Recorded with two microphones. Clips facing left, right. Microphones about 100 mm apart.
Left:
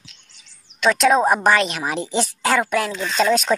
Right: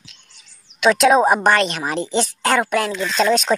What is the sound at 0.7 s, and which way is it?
A woman's voice, 5° right (ahead or behind).